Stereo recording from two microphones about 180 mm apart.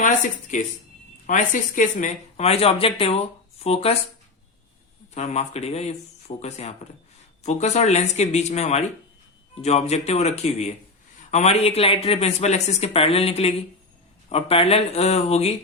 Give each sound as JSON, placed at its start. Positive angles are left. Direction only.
{"t": 0.0, "sound": "speech", "side_deg": 45}
{"t": 5.1, "sound": "speech", "side_deg": 35}